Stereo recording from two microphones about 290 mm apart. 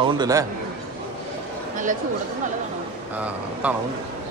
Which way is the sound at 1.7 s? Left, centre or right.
Right.